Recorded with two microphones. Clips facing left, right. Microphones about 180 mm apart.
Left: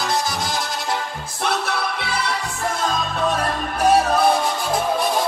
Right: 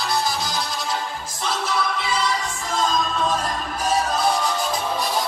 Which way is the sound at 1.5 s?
65° left (ahead or behind).